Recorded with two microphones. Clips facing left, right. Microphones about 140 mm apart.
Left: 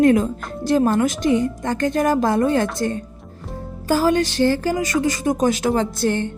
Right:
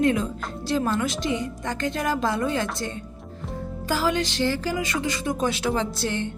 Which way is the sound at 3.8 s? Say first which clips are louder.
Left 7 dB; 45° left (ahead or behind).